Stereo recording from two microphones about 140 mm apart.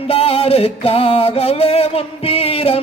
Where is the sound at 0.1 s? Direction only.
45° left (ahead or behind).